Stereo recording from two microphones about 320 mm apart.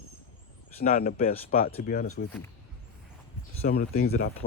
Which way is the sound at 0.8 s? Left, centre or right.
Left.